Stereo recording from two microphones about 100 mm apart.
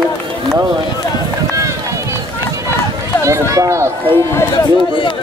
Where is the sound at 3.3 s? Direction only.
30° right (ahead or behind).